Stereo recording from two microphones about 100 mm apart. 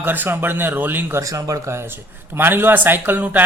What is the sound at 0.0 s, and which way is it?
Speech, 20° right (ahead or behind).